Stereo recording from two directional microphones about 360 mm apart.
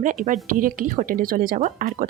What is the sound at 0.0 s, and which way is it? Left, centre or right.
Speech, right.